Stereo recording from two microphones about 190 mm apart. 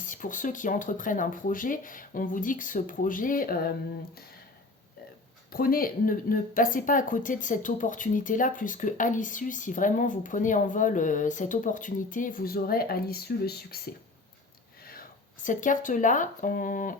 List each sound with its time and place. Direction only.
0.0 s speech: 45° left (ahead or behind)
5.5 s speech: 50° left (ahead or behind)